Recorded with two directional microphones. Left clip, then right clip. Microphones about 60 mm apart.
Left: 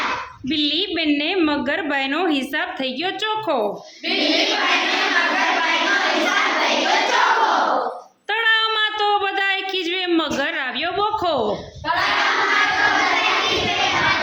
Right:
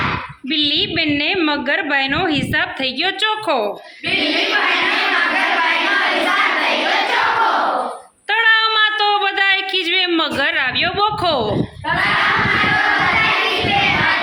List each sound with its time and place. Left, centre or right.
0.5 s a woman's voice: left
2.8 s a woman's voice: centre
8.3 s a sound: left
9.1 s a woman's voice: centre